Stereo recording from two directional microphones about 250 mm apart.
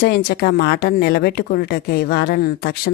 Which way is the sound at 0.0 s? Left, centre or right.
Left.